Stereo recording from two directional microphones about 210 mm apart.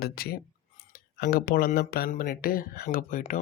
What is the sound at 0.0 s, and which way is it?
Speech, 45° left (ahead or behind).